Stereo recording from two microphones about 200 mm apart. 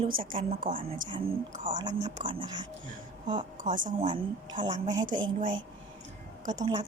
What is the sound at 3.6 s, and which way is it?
Speech, 40° right (ahead or behind).